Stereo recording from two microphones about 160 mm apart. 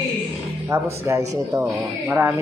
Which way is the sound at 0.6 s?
15° right (ahead or behind).